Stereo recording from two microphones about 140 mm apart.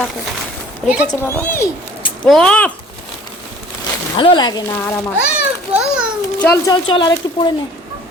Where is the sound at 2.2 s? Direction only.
5° left (ahead or behind).